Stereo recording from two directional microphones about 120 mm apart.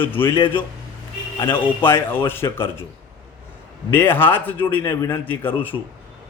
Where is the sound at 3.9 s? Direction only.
15° left (ahead or behind).